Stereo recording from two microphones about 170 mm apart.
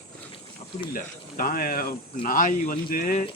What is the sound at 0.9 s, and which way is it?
Speech, 55° left (ahead or behind).